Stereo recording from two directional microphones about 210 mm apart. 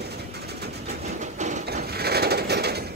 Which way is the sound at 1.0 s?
35° right (ahead or behind).